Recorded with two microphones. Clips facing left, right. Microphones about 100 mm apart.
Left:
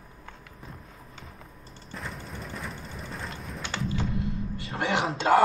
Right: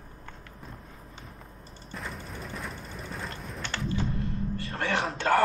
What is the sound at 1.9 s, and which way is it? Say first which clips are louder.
Vehicle: even; centre (ahead or behind).